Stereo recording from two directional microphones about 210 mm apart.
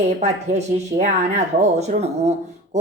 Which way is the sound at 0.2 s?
30° right (ahead or behind).